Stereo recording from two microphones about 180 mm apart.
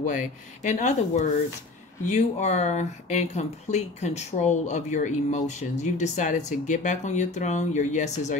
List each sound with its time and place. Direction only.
0.0 s speech: 45° left (ahead or behind)